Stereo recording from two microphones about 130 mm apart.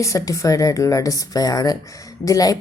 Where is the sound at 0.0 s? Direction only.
25° left (ahead or behind).